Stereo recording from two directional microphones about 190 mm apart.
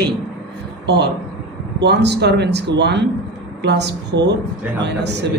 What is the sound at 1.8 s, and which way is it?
A man's voice, 65° right (ahead or behind).